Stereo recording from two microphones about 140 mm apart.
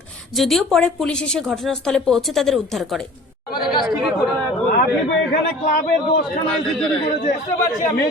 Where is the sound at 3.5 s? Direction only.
35° left (ahead or behind).